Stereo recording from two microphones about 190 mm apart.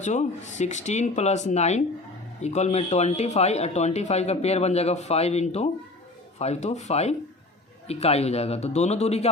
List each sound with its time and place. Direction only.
0.0 s speech: 40° left (ahead or behind)